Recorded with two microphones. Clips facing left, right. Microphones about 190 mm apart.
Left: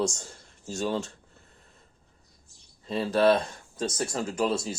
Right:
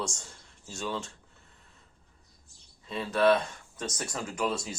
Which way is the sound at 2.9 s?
35° left (ahead or behind).